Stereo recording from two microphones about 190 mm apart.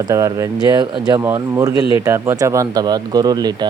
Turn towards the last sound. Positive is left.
turn(degrees=-20)  # may be behind; listen again after turning